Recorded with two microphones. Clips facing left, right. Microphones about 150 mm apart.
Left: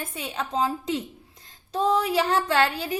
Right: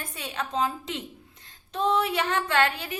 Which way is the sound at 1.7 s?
35° left (ahead or behind).